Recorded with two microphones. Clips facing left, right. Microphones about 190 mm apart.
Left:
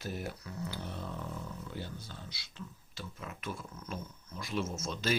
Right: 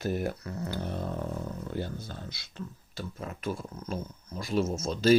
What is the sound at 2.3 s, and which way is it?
Speech, 50° right (ahead or behind).